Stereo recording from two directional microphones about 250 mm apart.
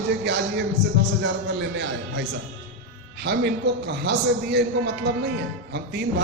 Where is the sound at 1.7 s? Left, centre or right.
Right.